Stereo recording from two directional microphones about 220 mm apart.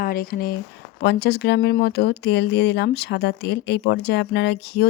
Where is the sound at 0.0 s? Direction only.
40° left (ahead or behind).